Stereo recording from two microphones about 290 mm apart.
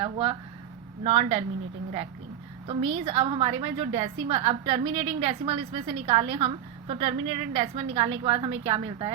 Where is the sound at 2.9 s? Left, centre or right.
Centre.